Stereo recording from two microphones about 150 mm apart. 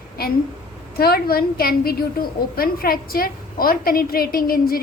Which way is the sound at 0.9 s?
90° left.